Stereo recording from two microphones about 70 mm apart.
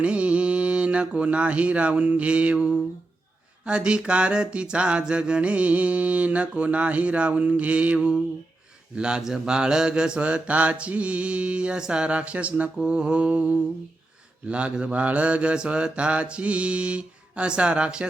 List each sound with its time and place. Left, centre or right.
0.0 s speech: centre
3.7 s mantra: centre